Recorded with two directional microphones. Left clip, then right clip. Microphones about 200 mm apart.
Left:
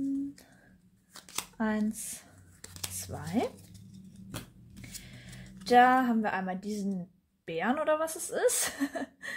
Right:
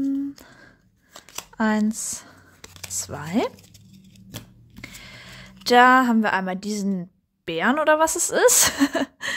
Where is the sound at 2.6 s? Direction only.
20° right (ahead or behind).